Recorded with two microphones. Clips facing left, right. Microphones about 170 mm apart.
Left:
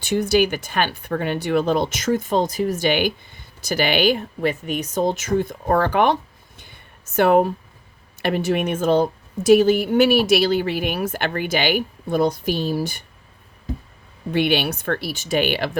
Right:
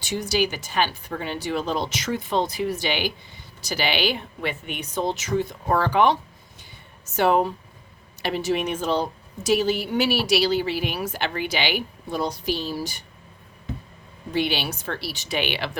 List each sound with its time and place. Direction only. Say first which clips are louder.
0.0 s a woman's voice: left 6 dB; 55° left (ahead or behind)
6.6 s a sound: left 2 dB; 55° left (ahead or behind)
8.2 s a woman's voice: left 4 dB; 55° left (ahead or behind)
14.3 s a woman's voice: left 5 dB; 60° left (ahead or behind)